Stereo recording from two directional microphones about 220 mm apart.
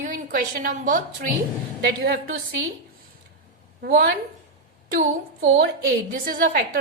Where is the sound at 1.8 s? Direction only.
50° right (ahead or behind).